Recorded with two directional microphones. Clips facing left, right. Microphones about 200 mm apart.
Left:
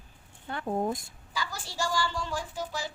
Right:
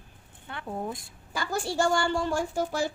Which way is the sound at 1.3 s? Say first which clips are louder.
Right 8 dB; 55° right (ahead or behind).